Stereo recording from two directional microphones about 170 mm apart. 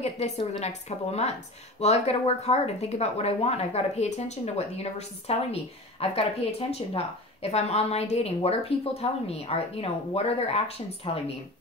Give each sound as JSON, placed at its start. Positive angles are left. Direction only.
{"t": 0.0, "sound": "speech", "side_deg": 40}